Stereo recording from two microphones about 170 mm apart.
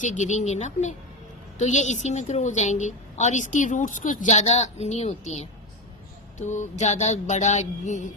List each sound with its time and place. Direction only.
0.0 s a woman's voice: 45° left (ahead or behind)